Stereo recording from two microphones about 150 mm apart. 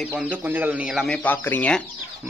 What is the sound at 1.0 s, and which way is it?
Speech, 10° left (ahead or behind).